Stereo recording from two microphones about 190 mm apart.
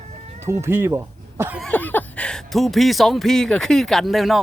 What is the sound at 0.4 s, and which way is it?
Speech, 15° right (ahead or behind).